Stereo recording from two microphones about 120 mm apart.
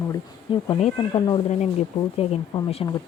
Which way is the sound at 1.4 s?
75° left (ahead or behind).